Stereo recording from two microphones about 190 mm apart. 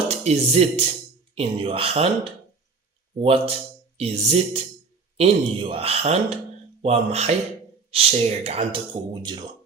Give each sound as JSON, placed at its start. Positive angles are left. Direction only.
{"t": 0.1, "sound": "speech", "side_deg": -35}